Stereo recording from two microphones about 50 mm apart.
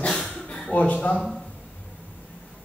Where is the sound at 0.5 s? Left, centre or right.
Left.